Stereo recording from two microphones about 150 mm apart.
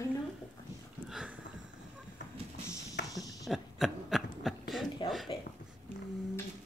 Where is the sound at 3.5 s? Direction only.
Centre (ahead or behind).